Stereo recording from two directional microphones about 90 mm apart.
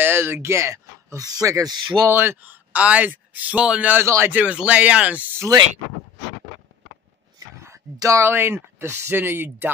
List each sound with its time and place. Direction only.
0.0 s speech: 25° right (ahead or behind); by 2.0 s 45° right (ahead or behind)
2.0 s a man's voice: 20° right (ahead or behind)
4.0 s speech: 30° right (ahead or behind)
4.3 s a man's voice: 15° right (ahead or behind)
7.6 s speech: 35° right (ahead or behind)